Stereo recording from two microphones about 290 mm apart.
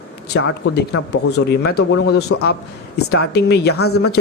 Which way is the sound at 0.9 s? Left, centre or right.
Left.